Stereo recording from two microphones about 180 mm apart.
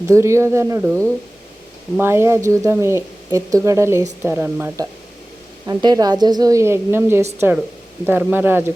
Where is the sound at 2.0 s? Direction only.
15° right (ahead or behind).